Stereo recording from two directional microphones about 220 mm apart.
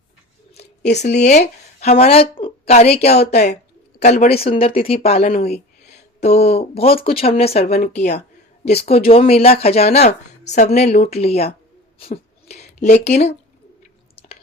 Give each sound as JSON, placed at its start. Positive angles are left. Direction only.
{"t": 0.9, "sound": "speech", "side_deg": 30}
{"t": 5.4, "sound": "a sound", "side_deg": 30}
{"t": 6.2, "sound": "speech", "side_deg": 30}
{"t": 7.7, "sound": "speech", "side_deg": 35}